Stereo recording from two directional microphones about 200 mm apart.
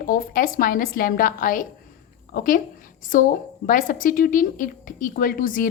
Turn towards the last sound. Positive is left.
turn(degrees=45)  # may be behind; listen again after turning